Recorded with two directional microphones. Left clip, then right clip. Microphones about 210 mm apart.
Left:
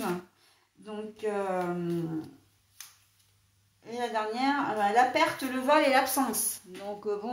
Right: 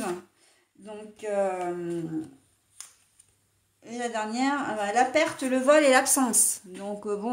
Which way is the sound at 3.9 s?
45° right (ahead or behind).